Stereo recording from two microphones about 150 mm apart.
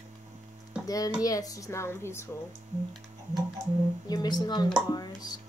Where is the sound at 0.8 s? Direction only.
25° left (ahead or behind).